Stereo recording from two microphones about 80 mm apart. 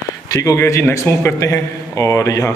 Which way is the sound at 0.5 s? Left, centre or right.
Left.